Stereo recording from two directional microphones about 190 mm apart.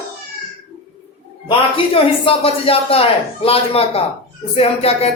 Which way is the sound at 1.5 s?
30° left (ahead or behind).